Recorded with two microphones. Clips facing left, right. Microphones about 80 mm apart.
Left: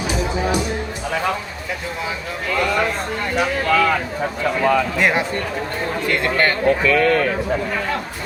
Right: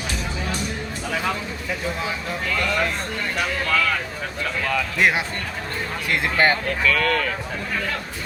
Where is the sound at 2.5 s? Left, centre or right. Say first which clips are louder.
Left 5 dB; centre.